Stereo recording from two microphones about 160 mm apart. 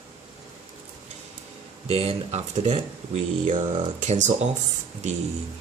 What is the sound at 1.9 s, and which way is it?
Speech, 40° right (ahead or behind).